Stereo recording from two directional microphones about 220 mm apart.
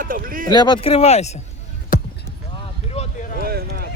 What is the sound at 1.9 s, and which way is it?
Basketball bounce, 40° left (ahead or behind).